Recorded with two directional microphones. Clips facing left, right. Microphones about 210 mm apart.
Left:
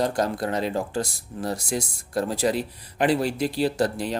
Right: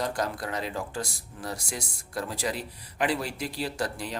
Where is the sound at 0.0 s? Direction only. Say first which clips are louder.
Left 6 dB; 30° left (ahead or behind).